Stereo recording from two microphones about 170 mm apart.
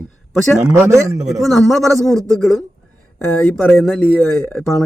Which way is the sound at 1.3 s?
Centre (ahead or behind).